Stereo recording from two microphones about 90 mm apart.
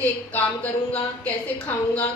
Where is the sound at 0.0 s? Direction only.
20° left (ahead or behind).